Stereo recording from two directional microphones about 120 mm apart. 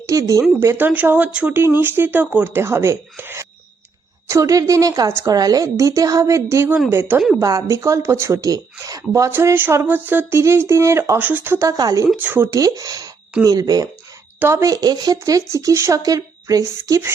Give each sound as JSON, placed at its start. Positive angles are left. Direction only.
{"t": 0.0, "sound": "speech", "side_deg": -25}
{"t": 11.8, "sound": "speech", "side_deg": -30}
{"t": 12.1, "sound": "speech", "side_deg": -15}
{"t": 12.5, "sound": "speech", "side_deg": -30}